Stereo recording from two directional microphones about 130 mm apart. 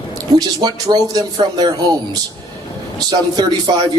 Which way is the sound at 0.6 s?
30° right (ahead or behind).